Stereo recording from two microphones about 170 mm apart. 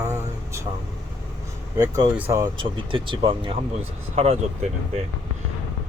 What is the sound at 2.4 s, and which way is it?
Speech, 30° right (ahead or behind).